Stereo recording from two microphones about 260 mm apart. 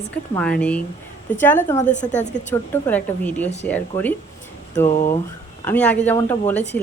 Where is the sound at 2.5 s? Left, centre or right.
Centre.